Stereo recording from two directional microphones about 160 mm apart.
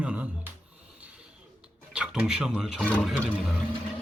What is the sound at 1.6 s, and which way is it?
Speech, 5° right (ahead or behind).